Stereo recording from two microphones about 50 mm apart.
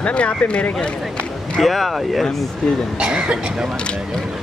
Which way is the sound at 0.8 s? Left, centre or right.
Left.